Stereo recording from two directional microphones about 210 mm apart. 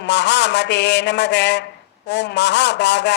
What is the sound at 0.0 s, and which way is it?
A man's voice, 55° left (ahead or behind).